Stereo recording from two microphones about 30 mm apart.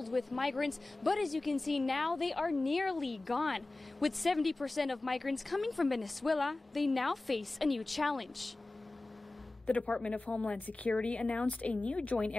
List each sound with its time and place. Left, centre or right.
0.0 s speech: centre
9.7 s a woman's voice: left